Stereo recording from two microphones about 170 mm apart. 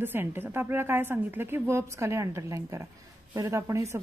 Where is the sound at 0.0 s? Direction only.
10° right (ahead or behind).